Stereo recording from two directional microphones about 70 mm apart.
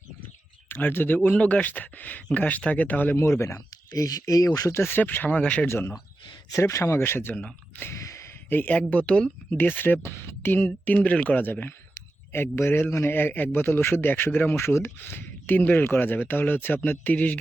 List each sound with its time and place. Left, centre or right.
0.7 s a man's voice: left
1.2 s a man's voice: centre
3.2 s speech: left
4.7 s a man's voice: left; by 5.6 s centre
5.6 s speech: left
6.5 s speech: left
7.0 s speech: left
7.8 s a sound: left
8.4 s a man's voice: left
9.5 s a man's voice: left
10.8 s a man's voice: left